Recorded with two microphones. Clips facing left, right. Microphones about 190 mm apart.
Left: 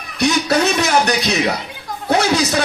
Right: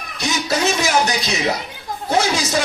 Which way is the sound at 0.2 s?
60° left (ahead or behind).